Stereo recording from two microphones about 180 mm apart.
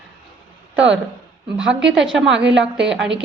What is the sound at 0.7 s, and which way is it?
Speech, 90° right.